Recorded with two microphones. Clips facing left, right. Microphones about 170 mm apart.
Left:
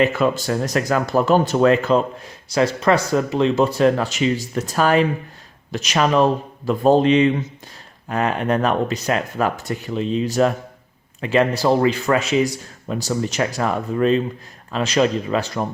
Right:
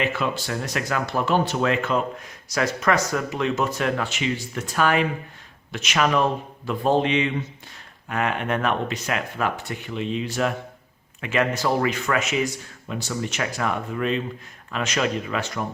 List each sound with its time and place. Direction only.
0.0 s speech: 45° left (ahead or behind)